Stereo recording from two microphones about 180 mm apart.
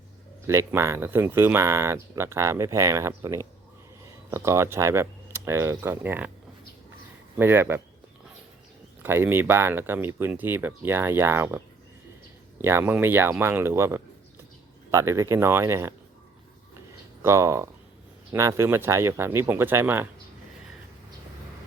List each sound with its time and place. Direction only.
0.4 s speech: 15° right (ahead or behind)
7.3 s speech: 10° right (ahead or behind)
9.0 s speech: 15° right (ahead or behind)
17.2 s speech: 15° right (ahead or behind)